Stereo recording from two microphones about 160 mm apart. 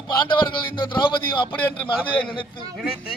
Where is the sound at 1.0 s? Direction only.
30° left (ahead or behind).